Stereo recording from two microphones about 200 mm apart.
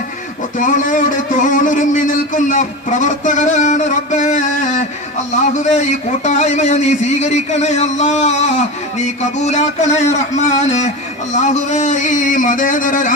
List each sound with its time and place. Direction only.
0.6 s a man's voice: 40° left (ahead or behind)